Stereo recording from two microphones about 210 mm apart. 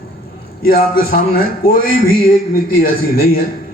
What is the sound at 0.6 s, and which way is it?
A man's voice, 45° left (ahead or behind).